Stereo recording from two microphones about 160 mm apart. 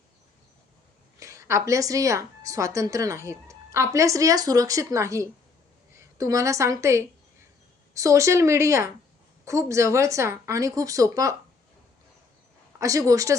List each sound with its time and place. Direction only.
1.2 s a woman's voice: 20° right (ahead or behind)
12.8 s speech: 20° right (ahead or behind)